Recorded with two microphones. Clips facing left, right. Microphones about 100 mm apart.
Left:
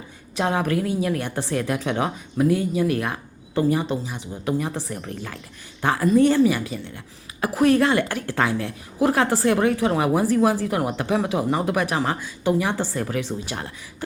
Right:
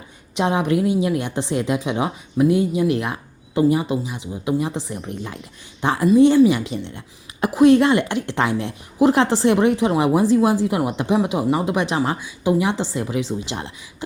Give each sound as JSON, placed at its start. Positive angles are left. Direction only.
{"t": 0.3, "sound": "a woman's voice", "side_deg": -20}